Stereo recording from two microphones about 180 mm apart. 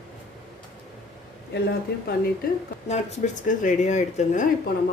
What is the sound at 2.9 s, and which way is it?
Speech, 40° left (ahead or behind).